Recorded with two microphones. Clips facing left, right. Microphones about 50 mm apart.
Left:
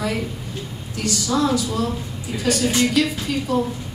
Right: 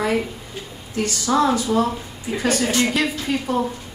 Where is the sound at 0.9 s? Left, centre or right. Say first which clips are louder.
Right 3 dB; right.